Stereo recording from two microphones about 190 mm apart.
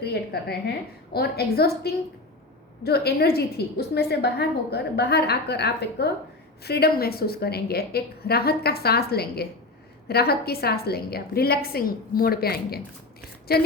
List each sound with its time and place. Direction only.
0.0 s a woman's voice: 55° left (ahead or behind)